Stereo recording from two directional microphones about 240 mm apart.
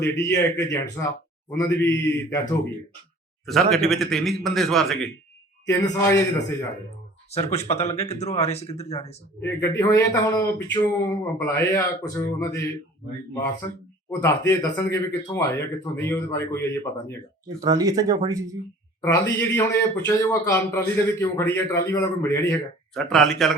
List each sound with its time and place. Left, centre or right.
0.0 s a man's voice: centre
3.4 s a man's voice: centre
5.6 s a man's voice: centre
7.5 s speech: left
9.4 s a man's voice: centre
14.2 s a man's voice: centre
17.6 s speech: centre
19.0 s a man's voice: centre